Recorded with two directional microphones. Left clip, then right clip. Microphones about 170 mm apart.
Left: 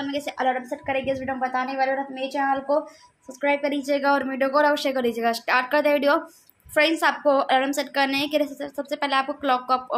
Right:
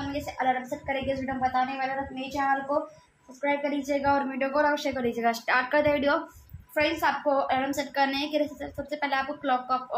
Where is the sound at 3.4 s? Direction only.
40° left (ahead or behind).